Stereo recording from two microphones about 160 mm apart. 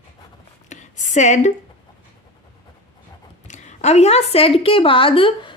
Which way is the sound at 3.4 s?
50° left (ahead or behind).